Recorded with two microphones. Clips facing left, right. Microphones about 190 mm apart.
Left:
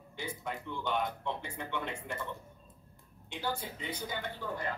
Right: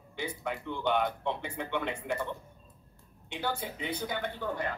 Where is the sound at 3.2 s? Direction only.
65° right (ahead or behind).